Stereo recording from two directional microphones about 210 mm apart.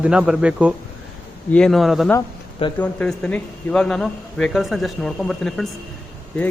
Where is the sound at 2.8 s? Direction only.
5° left (ahead or behind).